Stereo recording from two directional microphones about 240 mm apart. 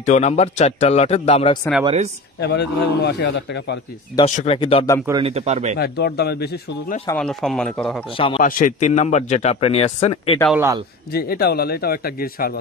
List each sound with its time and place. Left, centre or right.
0.0 s speech: left
2.4 s a man's voice: left
4.2 s speech: left
5.2 s speech: right
5.8 s speech: left
7.1 s speech: centre
8.4 s speech: left
10.5 s a man's voice: centre
11.1 s speech: left